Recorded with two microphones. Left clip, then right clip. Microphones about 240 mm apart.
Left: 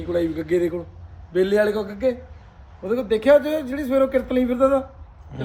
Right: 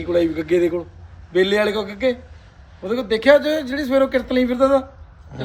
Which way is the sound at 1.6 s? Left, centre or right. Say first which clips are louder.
Right 1 dB; centre.